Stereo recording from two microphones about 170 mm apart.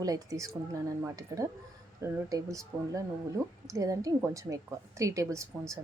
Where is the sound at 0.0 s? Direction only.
20° right (ahead or behind).